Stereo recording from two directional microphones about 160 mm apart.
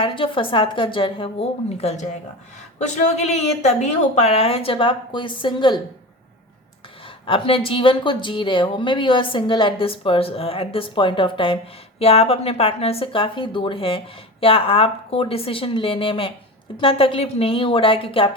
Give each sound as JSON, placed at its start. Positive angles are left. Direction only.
{"t": 0.0, "sound": "speech", "side_deg": 30}
{"t": 7.3, "sound": "speech", "side_deg": 35}